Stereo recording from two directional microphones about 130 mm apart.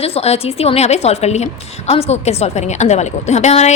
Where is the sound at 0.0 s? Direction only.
50° left (ahead or behind).